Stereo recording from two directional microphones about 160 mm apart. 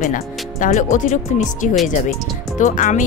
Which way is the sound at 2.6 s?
55° left (ahead or behind).